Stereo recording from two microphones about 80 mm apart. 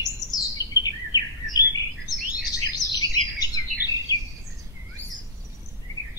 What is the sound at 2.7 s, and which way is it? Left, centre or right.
Bird, left.